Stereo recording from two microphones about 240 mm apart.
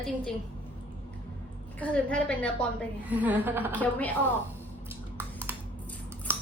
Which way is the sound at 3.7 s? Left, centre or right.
Centre.